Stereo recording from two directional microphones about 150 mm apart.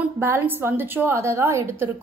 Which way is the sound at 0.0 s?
15° right (ahead or behind).